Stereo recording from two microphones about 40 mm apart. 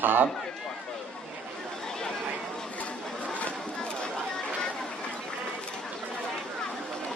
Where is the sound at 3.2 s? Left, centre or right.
Left.